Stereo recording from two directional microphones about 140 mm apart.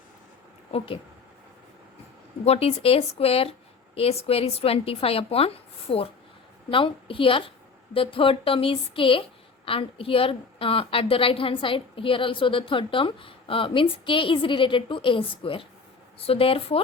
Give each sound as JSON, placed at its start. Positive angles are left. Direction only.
{"t": 2.4, "sound": "a woman's voice", "side_deg": 45}